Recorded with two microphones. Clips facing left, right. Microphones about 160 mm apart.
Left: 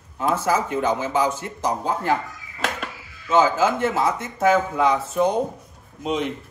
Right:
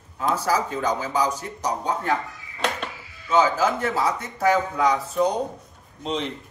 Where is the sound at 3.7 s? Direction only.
25° left (ahead or behind).